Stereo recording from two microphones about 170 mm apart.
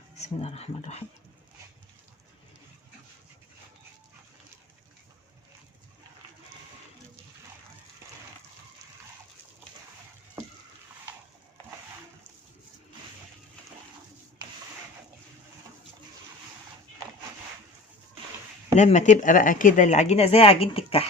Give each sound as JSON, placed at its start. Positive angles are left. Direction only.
{"t": 0.2, "sound": "speech", "side_deg": 40}
{"t": 18.8, "sound": "speech", "side_deg": 45}